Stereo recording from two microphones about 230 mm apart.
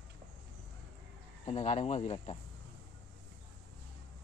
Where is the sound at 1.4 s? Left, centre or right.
Left.